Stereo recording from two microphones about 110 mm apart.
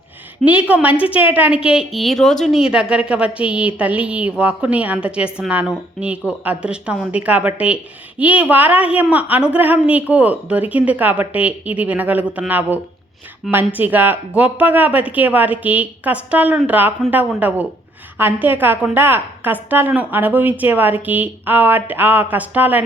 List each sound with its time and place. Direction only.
0.4 s a woman's voice: 15° right (ahead or behind)